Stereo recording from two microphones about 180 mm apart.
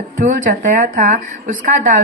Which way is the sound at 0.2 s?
45° right (ahead or behind).